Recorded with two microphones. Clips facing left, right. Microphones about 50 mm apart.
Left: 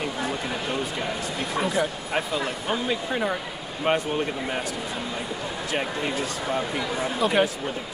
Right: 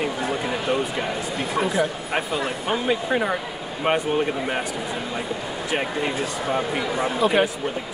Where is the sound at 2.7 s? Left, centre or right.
Right.